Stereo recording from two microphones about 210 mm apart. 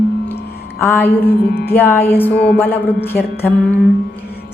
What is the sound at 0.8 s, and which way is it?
A woman's voice, 10° left (ahead or behind).